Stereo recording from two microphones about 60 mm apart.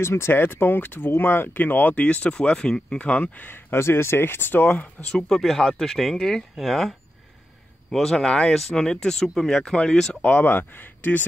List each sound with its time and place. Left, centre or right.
0.0 s speech: left
3.4 s speech: left
4.6 s speech: left
5.1 s speech: centre
10.2 s speech: left